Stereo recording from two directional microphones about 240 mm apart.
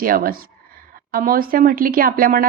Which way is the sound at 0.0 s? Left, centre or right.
Right.